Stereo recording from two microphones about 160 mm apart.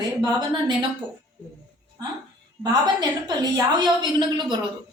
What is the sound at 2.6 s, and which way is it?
A woman's voice, 25° right (ahead or behind).